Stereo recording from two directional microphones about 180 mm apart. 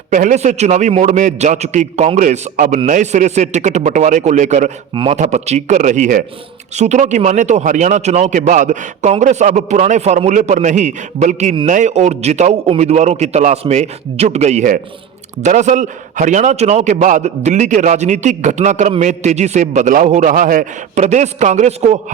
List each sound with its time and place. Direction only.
0.1 s a man's voice: 45° right (ahead or behind)